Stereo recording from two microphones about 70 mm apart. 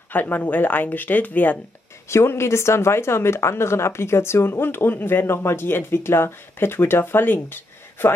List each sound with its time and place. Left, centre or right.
0.1 s speech: left
2.0 s speech: left